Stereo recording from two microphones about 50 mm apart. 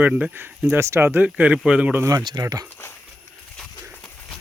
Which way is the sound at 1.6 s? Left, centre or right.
Right.